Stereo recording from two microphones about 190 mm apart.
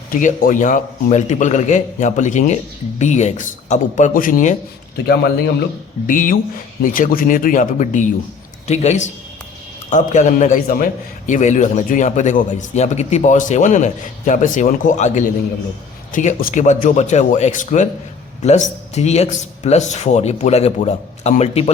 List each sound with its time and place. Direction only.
0.1 s a man's voice: 45° left (ahead or behind)
6.1 s a man's voice: 45° left (ahead or behind)